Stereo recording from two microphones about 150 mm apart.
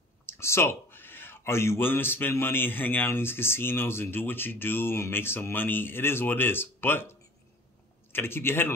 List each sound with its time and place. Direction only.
0.3 s speech: 15° left (ahead or behind)